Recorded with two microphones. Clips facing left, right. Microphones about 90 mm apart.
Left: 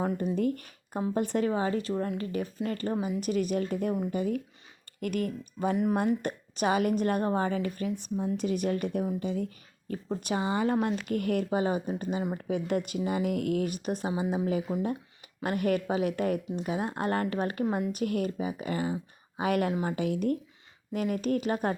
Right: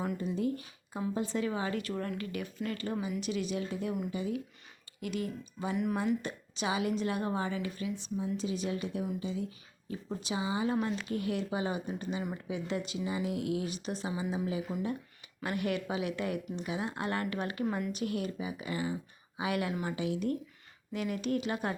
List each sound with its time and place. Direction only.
0.0 s a woman's voice: 45° left (ahead or behind)
1.5 s speech: 35° left (ahead or behind)
3.2 s speech: 45° left (ahead or behind)
5.7 s speech: 35° left (ahead or behind)
6.0 s speech: 55° left (ahead or behind); by 17.9 s 30° left (ahead or behind)
17.9 s speech: 50° left (ahead or behind)